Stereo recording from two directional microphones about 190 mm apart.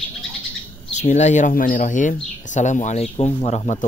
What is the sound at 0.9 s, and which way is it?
Speech, 40° left (ahead or behind).